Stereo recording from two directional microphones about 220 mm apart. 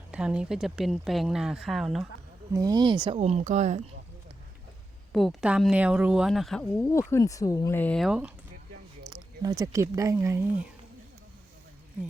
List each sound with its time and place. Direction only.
0.1 s speech: 5° right (ahead or behind)
2.5 s speech: 15° right (ahead or behind)
3.2 s speech: 30° right (ahead or behind)
5.1 s speech: centre (ahead or behind)
9.4 s speech: 15° right (ahead or behind)